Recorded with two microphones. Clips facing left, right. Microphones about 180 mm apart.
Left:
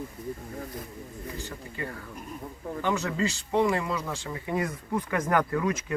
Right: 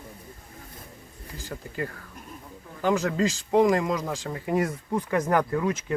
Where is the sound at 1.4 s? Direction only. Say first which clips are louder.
Right 2 dB; 40° right (ahead or behind).